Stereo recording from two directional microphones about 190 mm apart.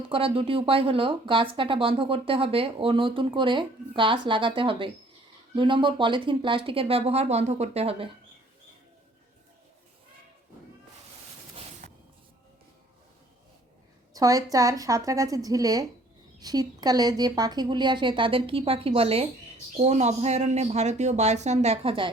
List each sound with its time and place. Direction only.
0.1 s speech: 30° right (ahead or behind)
11.8 s music: 45° right (ahead or behind)
14.1 s a woman's voice: 20° right (ahead or behind)